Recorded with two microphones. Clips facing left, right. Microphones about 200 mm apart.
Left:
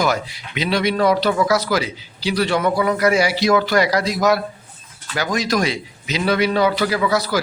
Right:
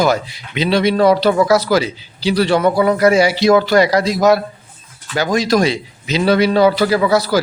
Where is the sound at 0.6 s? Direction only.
30° right (ahead or behind).